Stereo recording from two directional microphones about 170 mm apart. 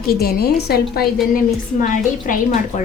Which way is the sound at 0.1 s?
65° left (ahead or behind).